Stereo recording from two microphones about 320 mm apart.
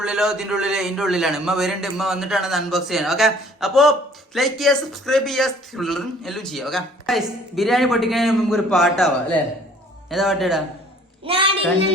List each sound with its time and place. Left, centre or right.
0.0 s speech: centre
10.1 s speech: centre
11.3 s a child's voice: centre